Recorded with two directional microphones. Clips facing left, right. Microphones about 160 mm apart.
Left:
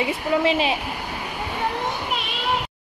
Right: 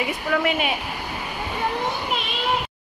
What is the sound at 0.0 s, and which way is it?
Speech, 25° left (ahead or behind).